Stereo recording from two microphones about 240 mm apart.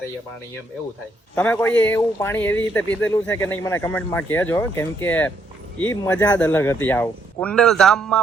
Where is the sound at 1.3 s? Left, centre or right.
Centre.